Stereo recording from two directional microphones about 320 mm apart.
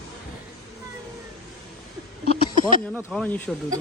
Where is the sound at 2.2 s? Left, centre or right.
Left.